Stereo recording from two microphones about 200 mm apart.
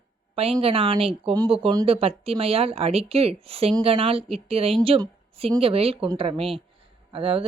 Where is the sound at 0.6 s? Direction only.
30° right (ahead or behind).